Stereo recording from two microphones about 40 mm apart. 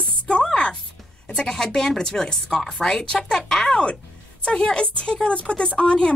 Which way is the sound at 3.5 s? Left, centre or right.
Centre.